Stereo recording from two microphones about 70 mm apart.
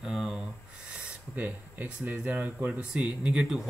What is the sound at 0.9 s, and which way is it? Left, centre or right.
Speech, right.